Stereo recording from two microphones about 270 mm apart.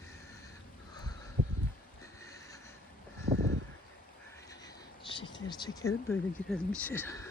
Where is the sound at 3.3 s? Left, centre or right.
Right.